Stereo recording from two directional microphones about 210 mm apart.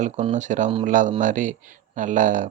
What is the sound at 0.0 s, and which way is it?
Speech, 35° right (ahead or behind).